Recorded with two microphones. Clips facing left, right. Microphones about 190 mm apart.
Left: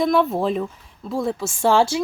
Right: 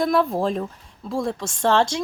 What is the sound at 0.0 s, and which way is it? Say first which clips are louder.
Speech: left 1 dB; centre (ahead or behind).